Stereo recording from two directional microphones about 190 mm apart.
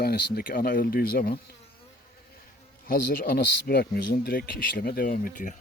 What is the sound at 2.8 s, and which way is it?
Speech, 50° left (ahead or behind).